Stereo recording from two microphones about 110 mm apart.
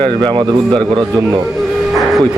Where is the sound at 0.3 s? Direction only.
45° right (ahead or behind).